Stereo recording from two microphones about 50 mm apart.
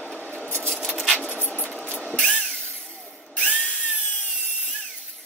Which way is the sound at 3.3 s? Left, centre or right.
Left.